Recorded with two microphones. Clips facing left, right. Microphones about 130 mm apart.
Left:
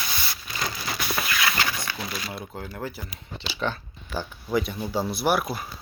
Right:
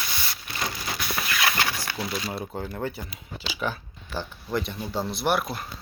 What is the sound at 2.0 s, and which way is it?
Speech, 10° right (ahead or behind).